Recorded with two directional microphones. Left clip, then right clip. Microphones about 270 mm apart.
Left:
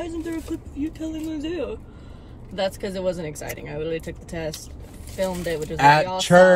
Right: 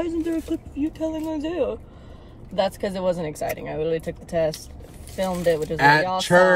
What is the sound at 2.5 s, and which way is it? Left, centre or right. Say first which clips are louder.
Speech: right 3 dB; centre.